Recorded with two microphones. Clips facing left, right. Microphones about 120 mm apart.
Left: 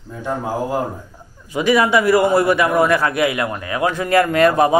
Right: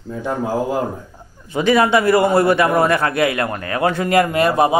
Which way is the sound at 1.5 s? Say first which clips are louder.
Right 1 dB; 30° right (ahead or behind).